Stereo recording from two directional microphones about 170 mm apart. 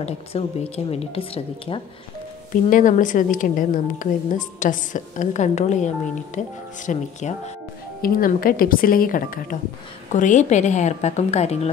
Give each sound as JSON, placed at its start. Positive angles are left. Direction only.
{"t": 0.0, "sound": "speech", "side_deg": 35}
{"t": 2.7, "sound": "a woman's voice", "side_deg": 50}
{"t": 8.0, "sound": "a woman's voice", "side_deg": 55}